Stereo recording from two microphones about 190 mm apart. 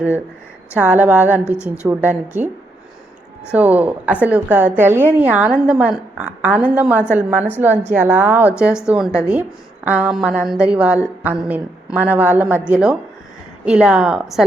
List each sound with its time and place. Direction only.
0.7 s a woman's voice: 10° right (ahead or behind)
3.5 s a woman's voice: 10° right (ahead or behind)